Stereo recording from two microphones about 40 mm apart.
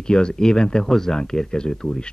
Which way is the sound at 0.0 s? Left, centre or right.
Left.